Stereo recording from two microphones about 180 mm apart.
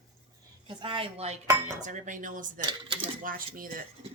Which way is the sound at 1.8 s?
45° right (ahead or behind).